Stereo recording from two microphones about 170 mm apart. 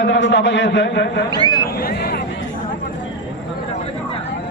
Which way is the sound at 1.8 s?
65° left (ahead or behind).